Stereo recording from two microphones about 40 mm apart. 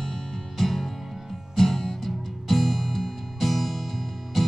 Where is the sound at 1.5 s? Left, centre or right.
Centre.